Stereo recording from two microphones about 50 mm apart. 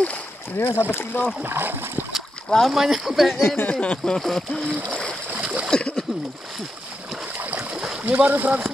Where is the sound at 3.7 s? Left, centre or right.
Left.